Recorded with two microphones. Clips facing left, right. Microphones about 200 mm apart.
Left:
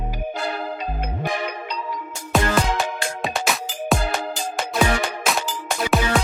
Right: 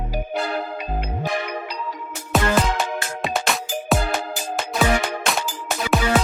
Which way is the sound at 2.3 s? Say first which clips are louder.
Right 1 dB; centre (ahead or behind).